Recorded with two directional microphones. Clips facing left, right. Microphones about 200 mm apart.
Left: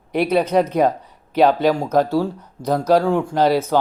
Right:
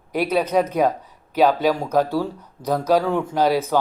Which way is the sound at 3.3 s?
10° right (ahead or behind).